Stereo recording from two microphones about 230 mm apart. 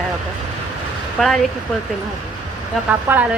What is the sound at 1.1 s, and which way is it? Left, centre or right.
Speech, centre.